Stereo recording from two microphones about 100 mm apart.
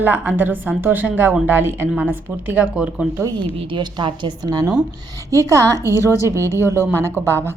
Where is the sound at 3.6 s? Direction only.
55° right (ahead or behind).